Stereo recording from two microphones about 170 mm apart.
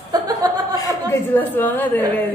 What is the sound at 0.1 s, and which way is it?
Chuckle, 20° right (ahead or behind).